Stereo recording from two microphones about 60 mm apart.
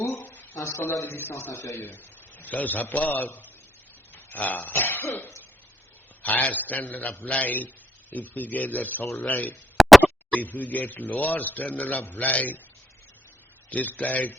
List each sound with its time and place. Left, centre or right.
0.0 s a sound: left
1.0 s a man's voice: left
1.7 s a man's voice: left
4.1 s cough: left
6.2 s a man's voice: left
9.8 s a sound: centre
10.3 s a man's voice: left
13.7 s a man's voice: left